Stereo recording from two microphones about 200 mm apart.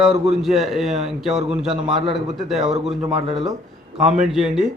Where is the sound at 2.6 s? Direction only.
35° right (ahead or behind).